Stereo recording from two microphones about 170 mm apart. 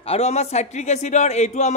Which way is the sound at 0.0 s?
35° left (ahead or behind).